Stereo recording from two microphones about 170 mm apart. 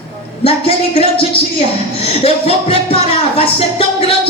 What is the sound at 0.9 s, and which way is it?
Speech, 35° left (ahead or behind).